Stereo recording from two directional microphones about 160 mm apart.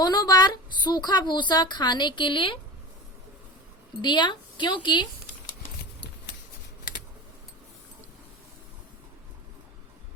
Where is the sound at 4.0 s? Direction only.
30° left (ahead or behind).